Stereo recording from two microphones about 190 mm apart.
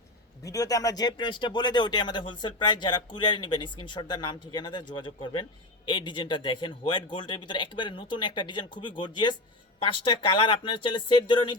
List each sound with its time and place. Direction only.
0.4 s speech: 20° left (ahead or behind)